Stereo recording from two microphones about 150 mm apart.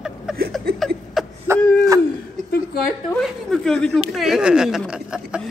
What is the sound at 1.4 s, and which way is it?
Owl, 20° right (ahead or behind).